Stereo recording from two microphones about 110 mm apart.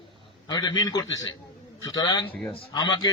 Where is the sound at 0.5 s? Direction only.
35° left (ahead or behind).